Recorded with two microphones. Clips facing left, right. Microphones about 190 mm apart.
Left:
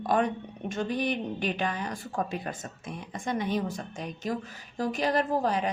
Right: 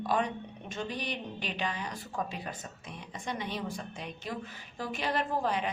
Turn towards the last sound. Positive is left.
turn(degrees=40)  # may be behind; listen again after turning